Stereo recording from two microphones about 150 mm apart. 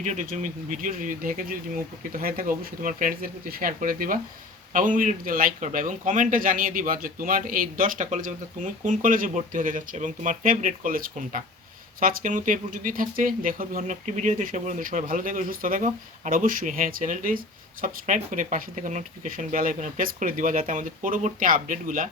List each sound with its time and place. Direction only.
0.0 s speech: 55° right (ahead or behind)